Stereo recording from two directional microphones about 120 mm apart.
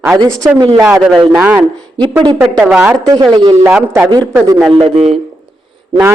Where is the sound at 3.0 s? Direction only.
30° right (ahead or behind).